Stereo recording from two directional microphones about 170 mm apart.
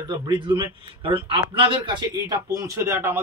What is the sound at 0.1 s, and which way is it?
A man's voice, 25° right (ahead or behind).